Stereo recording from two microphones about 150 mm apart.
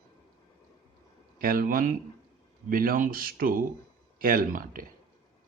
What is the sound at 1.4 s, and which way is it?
Speech, 70° right (ahead or behind).